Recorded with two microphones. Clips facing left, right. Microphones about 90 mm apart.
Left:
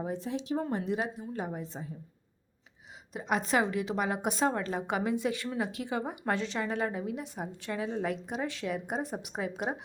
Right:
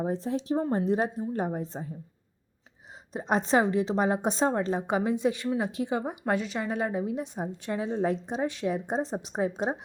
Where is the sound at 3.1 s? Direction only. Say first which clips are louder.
Right 4 dB; 30° right (ahead or behind).